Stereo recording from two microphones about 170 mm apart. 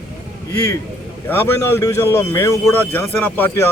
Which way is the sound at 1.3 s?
15° left (ahead or behind).